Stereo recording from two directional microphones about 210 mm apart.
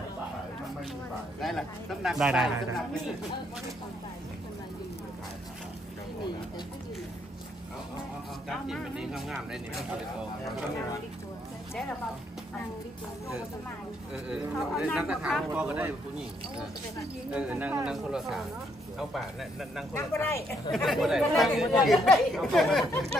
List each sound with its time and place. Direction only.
1.4 s speech: centre (ahead or behind)
8.5 s speech: centre (ahead or behind)
14.1 s speech: 5° right (ahead or behind)
17.3 s speech: 5° right (ahead or behind)
19.9 s speech: 10° left (ahead or behind)
20.7 s speech: centre (ahead or behind)